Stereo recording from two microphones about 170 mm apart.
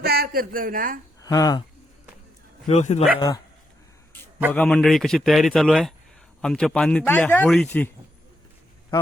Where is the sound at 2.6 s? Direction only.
40° left (ahead or behind).